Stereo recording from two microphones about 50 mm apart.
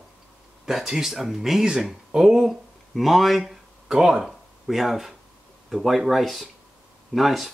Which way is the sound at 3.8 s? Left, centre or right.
Centre.